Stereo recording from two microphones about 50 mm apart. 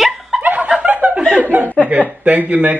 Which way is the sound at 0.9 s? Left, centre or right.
Right.